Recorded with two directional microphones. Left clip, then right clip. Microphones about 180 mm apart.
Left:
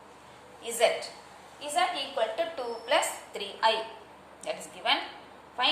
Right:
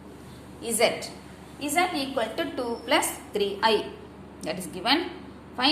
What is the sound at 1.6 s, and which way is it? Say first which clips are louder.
A woman's voice: right 3 dB; 30° right (ahead or behind).